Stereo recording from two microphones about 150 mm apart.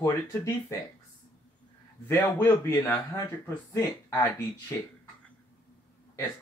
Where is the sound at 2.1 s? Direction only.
15° left (ahead or behind).